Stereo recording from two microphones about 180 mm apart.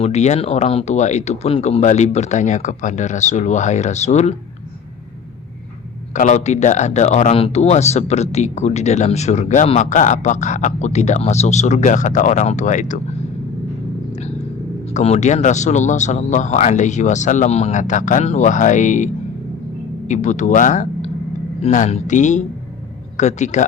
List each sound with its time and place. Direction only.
0.0 s speech: 40° left (ahead or behind)
6.1 s speech: 40° left (ahead or behind)
14.1 s a sound: 35° left (ahead or behind)
14.9 s a man's voice: 40° left (ahead or behind)